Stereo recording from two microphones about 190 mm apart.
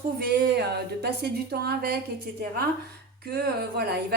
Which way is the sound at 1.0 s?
55° right (ahead or behind).